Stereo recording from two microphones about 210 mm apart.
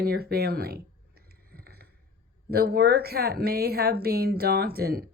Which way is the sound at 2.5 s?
50° right (ahead or behind).